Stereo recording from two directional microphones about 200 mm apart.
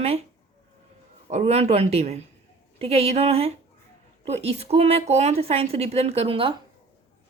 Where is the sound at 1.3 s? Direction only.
35° right (ahead or behind).